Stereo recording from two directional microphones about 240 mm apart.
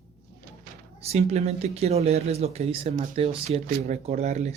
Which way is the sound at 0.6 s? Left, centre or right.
Right.